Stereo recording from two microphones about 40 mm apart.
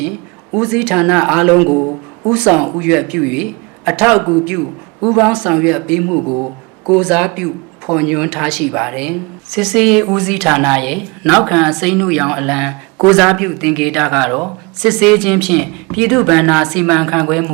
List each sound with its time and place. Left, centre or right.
0.5 s speech: right
9.5 s speech: centre